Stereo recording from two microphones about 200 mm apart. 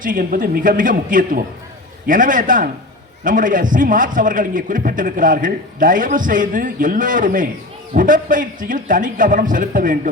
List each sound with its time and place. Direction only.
0.0 s a man's voice: 45° right (ahead or behind)